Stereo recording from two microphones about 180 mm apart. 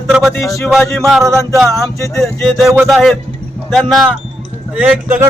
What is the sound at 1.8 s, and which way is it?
Speech, 15° left (ahead or behind).